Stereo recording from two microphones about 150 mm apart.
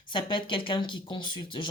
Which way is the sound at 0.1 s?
30° left (ahead or behind).